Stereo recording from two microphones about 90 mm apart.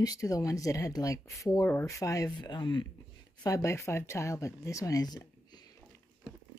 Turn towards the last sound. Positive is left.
turn(degrees=45)  # may be behind; listen again after turning